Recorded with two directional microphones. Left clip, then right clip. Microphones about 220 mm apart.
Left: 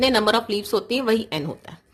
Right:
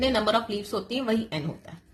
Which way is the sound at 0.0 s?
30° left (ahead or behind).